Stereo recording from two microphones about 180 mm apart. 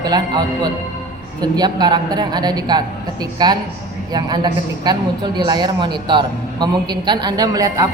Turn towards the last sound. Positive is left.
turn(degrees=-20)  # may be behind; listen again after turning